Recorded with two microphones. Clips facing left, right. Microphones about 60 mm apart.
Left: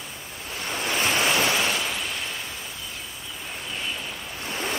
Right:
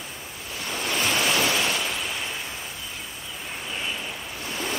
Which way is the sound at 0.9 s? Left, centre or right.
Centre.